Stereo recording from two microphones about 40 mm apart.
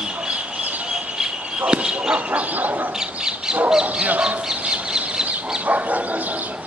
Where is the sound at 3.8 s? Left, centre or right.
Right.